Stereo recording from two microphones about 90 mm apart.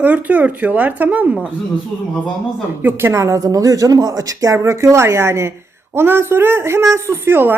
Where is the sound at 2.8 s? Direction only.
25° right (ahead or behind).